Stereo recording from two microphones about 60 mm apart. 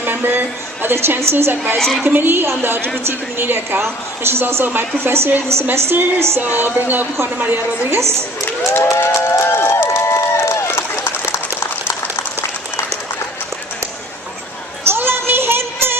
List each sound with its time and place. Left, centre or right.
0.0 s speech: right
1.8 s a woman's voice: centre
2.0 s a woman's voice: right
6.4 s speech: right
7.9 s a woman's voice: right
8.7 s a sound: left
14.8 s music: right